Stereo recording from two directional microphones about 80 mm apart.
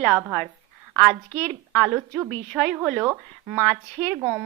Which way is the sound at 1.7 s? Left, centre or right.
Centre.